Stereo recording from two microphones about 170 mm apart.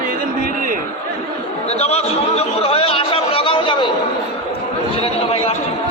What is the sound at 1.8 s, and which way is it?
Chatter, 40° left (ahead or behind).